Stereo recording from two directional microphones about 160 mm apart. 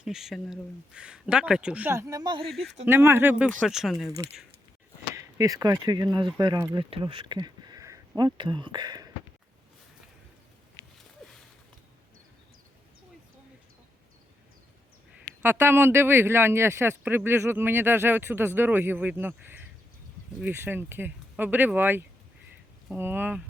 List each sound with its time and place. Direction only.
0.0 s speech: 5° right (ahead or behind); by 2.5 s 30° right (ahead or behind)
2.5 s speech: centre (ahead or behind)
2.8 s speech: 15° right (ahead or behind)
5.1 s speech: 20° right (ahead or behind)
11.2 s a sound: centre (ahead or behind)
15.4 s speech: 15° right (ahead or behind)